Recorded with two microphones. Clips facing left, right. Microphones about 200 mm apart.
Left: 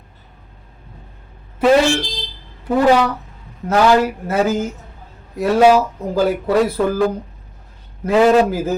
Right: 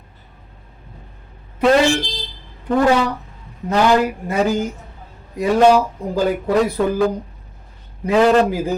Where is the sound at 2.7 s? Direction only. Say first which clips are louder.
Left 2 dB; 5° left (ahead or behind).